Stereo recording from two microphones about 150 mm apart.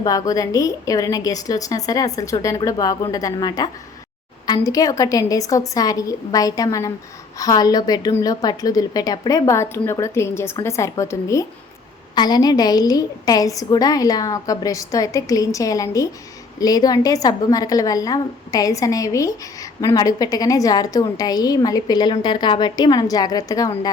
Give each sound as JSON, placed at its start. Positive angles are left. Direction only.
{"t": 0.0, "sound": "a woman's voice", "side_deg": 25}